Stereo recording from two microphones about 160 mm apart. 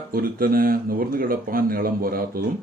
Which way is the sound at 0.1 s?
65° right (ahead or behind).